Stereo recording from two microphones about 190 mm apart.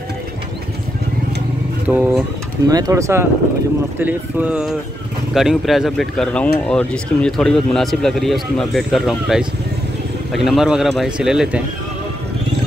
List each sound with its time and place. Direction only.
1.9 s speech: 5° right (ahead or behind)
2.7 s a man's voice: 15° right (ahead or behind)